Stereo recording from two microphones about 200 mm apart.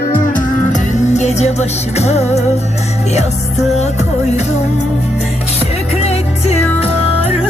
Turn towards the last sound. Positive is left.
turn(degrees=30)  # may be behind; listen again after turning